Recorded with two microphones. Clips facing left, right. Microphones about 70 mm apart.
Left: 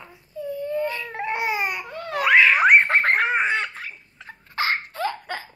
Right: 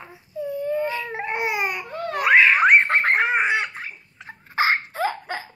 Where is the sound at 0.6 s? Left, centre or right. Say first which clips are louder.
Right 1 dB; right.